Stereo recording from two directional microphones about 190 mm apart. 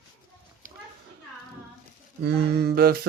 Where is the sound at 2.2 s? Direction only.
55° right (ahead or behind).